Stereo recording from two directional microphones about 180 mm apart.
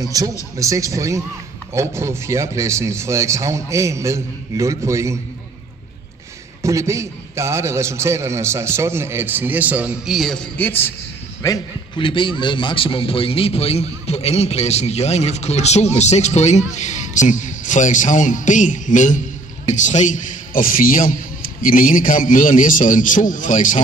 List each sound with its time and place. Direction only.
0.0 s a man's voice: 20° right (ahead or behind)
6.6 s a man's voice: 15° right (ahead or behind); by 10.9 s 10° left (ahead or behind)
11.4 s a man's voice: 25° left (ahead or behind); by 23.8 s 45° left (ahead or behind)